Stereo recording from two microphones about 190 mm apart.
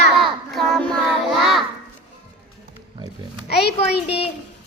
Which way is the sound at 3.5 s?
60° left (ahead or behind).